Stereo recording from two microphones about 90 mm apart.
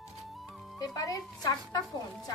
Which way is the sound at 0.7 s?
45° left (ahead or behind).